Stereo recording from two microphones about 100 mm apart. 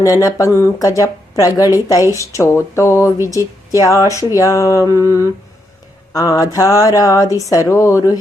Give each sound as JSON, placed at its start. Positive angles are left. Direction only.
{"t": 0.0, "sound": "speech", "side_deg": 35}
{"t": 6.1, "sound": "speech", "side_deg": 35}